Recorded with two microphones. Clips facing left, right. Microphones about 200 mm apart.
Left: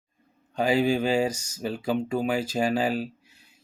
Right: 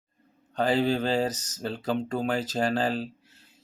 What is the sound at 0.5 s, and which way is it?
Speech, 10° left (ahead or behind).